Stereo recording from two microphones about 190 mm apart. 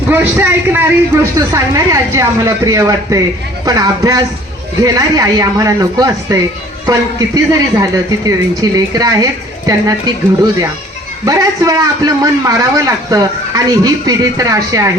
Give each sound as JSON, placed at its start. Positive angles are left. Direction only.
{"t": 0.1, "sound": "speech", "side_deg": -10}
{"t": 11.3, "sound": "speech", "side_deg": -20}